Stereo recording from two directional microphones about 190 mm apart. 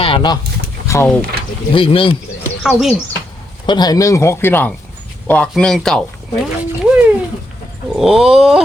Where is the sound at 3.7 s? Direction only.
20° left (ahead or behind); by 6.0 s 5° left (ahead or behind).